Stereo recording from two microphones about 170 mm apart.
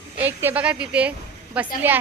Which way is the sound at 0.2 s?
10° right (ahead or behind).